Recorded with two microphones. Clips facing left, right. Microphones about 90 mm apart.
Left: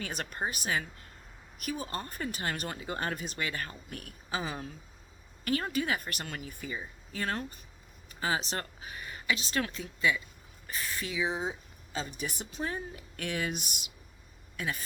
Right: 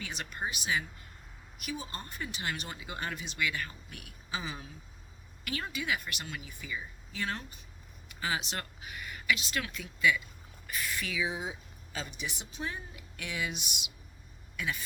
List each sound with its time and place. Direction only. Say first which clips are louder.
0.0 s speech: left 3 dB; 45° left (ahead or behind)
11.9 s speech: left 3 dB; 45° left (ahead or behind)